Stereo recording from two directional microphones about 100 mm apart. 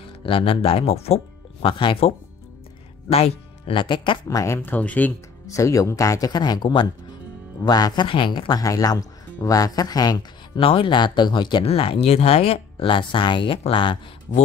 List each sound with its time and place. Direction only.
0.2 s speech: 65° left (ahead or behind)
3.1 s speech: 90° left
3.7 s speech: 55° left (ahead or behind)
4.3 s speech: 35° left (ahead or behind)
4.6 s speech: 15° left (ahead or behind)
5.5 s speech: 35° left (ahead or behind)
8.1 s speech: 55° left (ahead or behind)
8.6 s speech: 35° left (ahead or behind)
10.6 s speech: 65° left (ahead or behind); by 11.6 s 50° left (ahead or behind)
11.6 s speech: 75° left (ahead or behind); by 13.9 s 60° left (ahead or behind)